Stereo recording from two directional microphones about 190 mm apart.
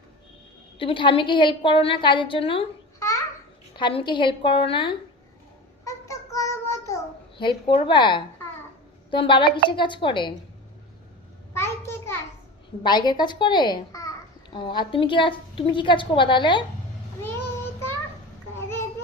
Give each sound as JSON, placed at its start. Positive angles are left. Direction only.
{"t": 0.8, "sound": "a woman's voice", "side_deg": 25}
{"t": 3.8, "sound": "a woman's voice", "side_deg": 25}
{"t": 5.8, "sound": "child singing", "side_deg": 15}
{"t": 9.0, "sound": "a woman's voice", "side_deg": 25}
{"t": 11.5, "sound": "a sound", "side_deg": 15}
{"t": 12.8, "sound": "a woman's voice", "side_deg": 20}
{"t": 17.2, "sound": "child singing", "side_deg": 10}